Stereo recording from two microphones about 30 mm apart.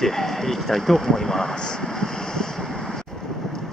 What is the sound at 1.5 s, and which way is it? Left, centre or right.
Vehicle, left.